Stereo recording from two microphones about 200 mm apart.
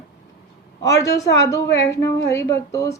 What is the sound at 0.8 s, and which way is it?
A woman's voice, 15° left (ahead or behind).